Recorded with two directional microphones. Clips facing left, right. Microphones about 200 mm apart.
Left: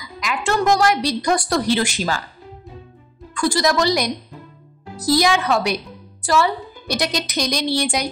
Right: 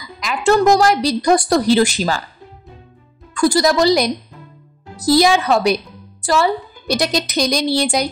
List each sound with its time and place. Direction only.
0.2 s a woman's voice: 35° right (ahead or behind)
3.3 s a woman's voice: 40° right (ahead or behind)